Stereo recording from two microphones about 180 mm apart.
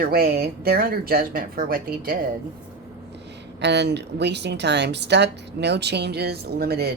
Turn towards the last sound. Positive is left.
turn(degrees=-60)  # may be behind; listen again after turning